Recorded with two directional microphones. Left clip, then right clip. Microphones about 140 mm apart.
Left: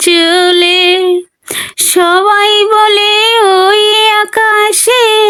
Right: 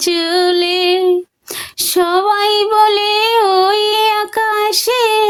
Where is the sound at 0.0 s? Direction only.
30° left (ahead or behind).